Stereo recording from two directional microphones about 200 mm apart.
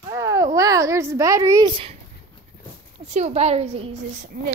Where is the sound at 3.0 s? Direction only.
35° right (ahead or behind).